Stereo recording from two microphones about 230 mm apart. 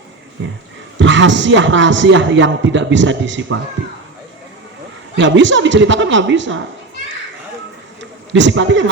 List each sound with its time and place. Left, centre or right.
0.4 s a man's voice: right
5.1 s a man's voice: right
8.3 s a man's voice: right